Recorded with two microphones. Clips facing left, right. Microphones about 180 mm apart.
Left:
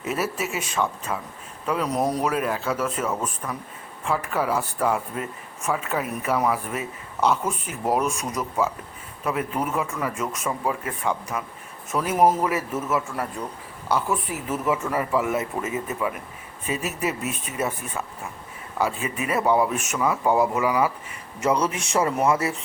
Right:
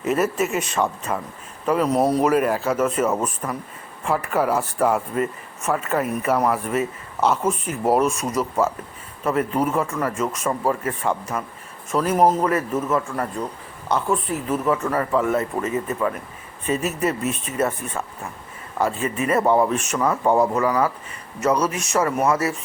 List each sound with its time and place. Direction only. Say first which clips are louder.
0.1 s a man's voice: right 6 dB; 5° left (ahead or behind)
0.8 s a man's voice: right 1 dB; 5° right (ahead or behind)
13.8 s a man's voice: right 2 dB; 5° left (ahead or behind)